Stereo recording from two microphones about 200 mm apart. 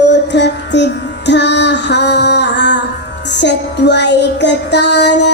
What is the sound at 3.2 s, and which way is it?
Music, 60° left (ahead or behind).